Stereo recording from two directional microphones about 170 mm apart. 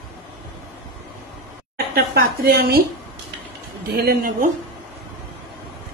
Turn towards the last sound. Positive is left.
turn(degrees=-55)  # may be behind; listen again after turning